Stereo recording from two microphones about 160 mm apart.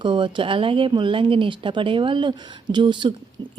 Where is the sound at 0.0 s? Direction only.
30° right (ahead or behind).